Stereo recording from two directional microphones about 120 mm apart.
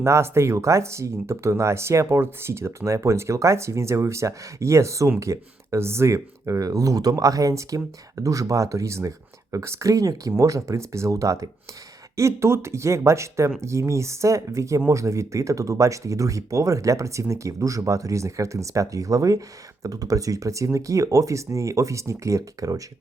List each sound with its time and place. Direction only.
0.0 s speech: 20° right (ahead or behind)